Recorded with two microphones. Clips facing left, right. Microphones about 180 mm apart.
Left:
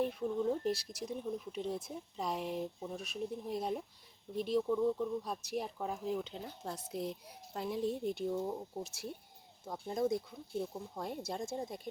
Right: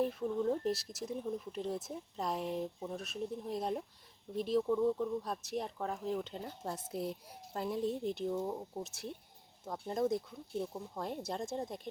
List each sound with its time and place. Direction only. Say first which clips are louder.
0.0 s speech: right 1 dB; centre (ahead or behind)